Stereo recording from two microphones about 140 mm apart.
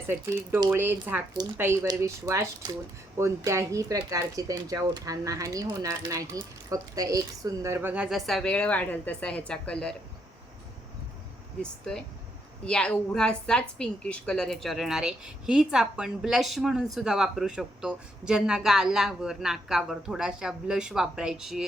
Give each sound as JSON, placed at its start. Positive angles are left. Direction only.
{"t": 0.1, "sound": "speech", "side_deg": -15}
{"t": 11.6, "sound": "a woman's voice", "side_deg": 5}